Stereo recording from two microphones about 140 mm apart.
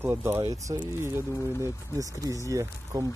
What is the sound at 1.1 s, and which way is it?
Speech, 20° right (ahead or behind).